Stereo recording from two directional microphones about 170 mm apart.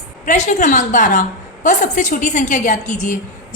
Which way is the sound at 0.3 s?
45° left (ahead or behind).